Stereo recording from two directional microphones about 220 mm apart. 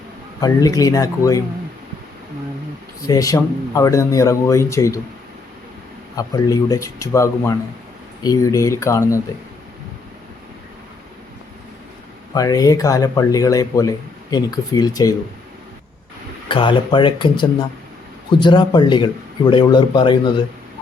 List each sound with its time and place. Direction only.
0.3 s speech: 15° left (ahead or behind)
3.1 s speech: 15° left (ahead or behind)
6.1 s speech: 15° left (ahead or behind)
12.3 s speech: 15° left (ahead or behind)
16.5 s speech: 20° left (ahead or behind)